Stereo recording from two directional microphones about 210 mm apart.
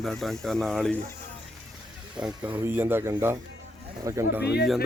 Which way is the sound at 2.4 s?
10° right (ahead or behind).